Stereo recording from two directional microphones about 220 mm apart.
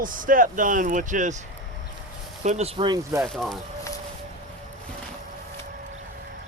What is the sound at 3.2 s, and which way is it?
Speech, centre (ahead or behind).